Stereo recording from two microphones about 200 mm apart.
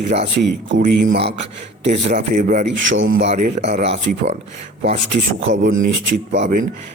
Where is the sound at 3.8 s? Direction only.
60° right (ahead or behind).